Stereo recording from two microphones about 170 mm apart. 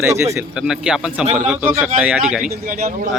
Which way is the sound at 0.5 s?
5° right (ahead or behind).